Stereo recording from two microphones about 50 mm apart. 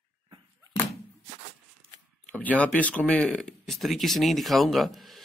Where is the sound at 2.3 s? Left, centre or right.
Left.